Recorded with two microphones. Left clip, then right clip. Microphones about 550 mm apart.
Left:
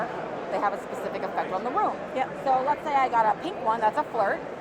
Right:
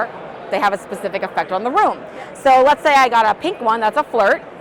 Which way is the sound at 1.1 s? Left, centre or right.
Right.